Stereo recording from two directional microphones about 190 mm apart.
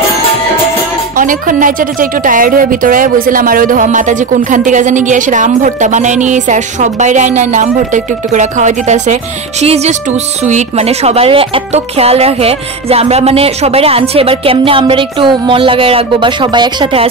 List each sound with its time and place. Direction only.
1.1 s a woman's voice: 45° right (ahead or behind); by 17.1 s 30° right (ahead or behind)